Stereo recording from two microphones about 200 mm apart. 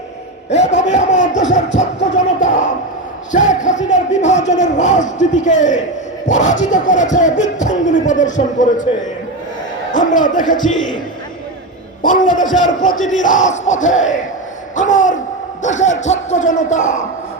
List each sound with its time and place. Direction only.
0.5 s a sound: 35° left (ahead or behind)
1.5 s music: 35° left (ahead or behind)
3.3 s a man's voice: 40° left (ahead or behind)
9.9 s speech: 40° left (ahead or behind)
12.0 s a man's voice: 40° left (ahead or behind)